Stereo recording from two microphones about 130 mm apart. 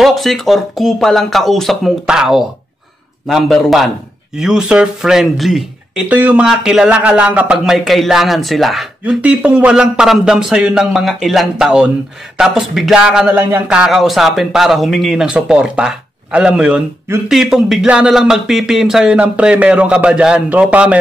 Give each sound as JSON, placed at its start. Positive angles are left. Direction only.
{"t": 0.0, "sound": "speech", "side_deg": 0}